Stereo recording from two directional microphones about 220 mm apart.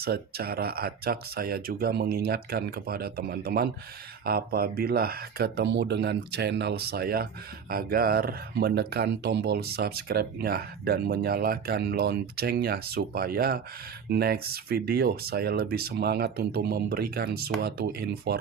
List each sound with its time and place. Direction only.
0.0 s speech: 45° right (ahead or behind)